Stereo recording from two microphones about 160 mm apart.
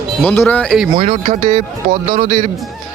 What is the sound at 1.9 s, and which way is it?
Speech, 40° right (ahead or behind).